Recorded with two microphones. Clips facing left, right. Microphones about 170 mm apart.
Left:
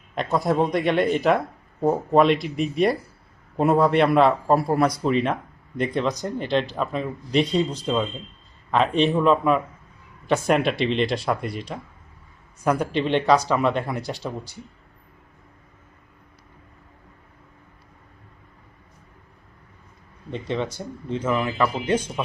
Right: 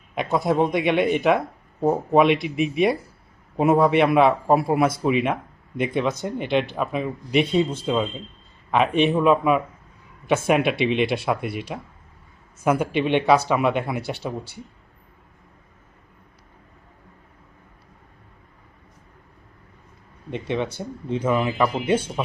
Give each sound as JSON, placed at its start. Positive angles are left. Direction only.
{"t": 0.2, "sound": "a man's voice", "side_deg": 0}
{"t": 20.3, "sound": "speech", "side_deg": -15}